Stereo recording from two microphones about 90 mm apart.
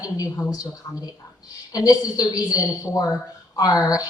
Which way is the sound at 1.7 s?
45° left (ahead or behind).